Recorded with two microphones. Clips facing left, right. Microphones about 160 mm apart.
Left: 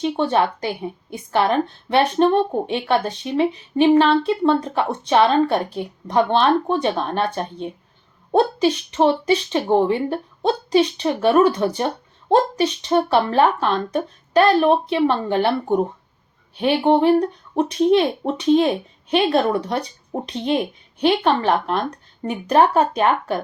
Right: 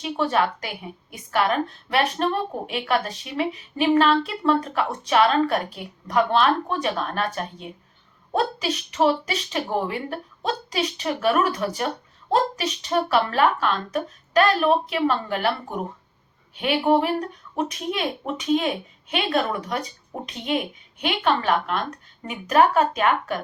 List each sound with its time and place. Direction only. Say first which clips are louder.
0.0 s a woman's voice: left 4 dB; 30° left (ahead or behind)